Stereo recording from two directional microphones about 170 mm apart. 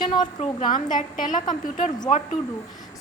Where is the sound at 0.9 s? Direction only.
50° left (ahead or behind).